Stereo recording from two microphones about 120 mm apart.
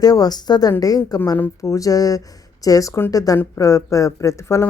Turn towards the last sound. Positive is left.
turn(degrees=20)  # may be behind; listen again after turning